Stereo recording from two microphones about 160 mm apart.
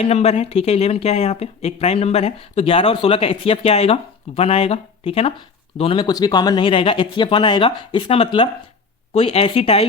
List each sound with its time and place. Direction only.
0.0 s speech: 40° left (ahead or behind)